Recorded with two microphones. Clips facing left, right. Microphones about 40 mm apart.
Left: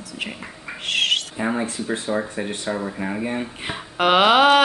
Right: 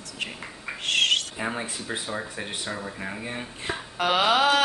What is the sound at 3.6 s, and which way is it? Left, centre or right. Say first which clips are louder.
Speech: left 3 dB; left.